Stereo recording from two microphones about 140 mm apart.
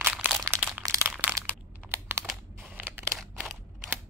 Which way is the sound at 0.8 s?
20° right (ahead or behind).